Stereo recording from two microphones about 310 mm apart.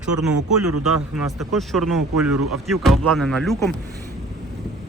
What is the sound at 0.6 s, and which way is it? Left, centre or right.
Speech, right.